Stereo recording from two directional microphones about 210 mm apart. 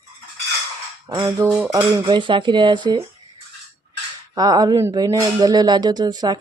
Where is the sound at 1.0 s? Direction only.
20° right (ahead or behind).